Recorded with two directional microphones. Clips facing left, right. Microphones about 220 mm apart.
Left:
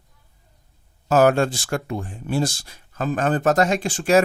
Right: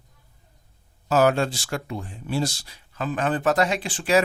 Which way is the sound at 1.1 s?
50° left (ahead or behind).